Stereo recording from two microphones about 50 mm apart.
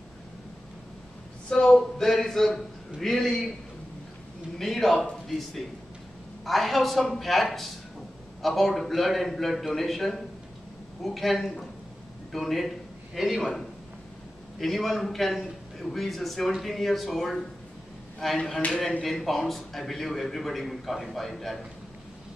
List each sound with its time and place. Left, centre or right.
1.5 s a man's voice: centre
4.6 s a man's voice: centre
6.4 s a man's voice: centre
14.6 s a man's voice: centre